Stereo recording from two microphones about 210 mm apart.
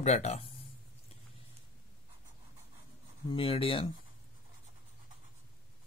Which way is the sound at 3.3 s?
25° left (ahead or behind).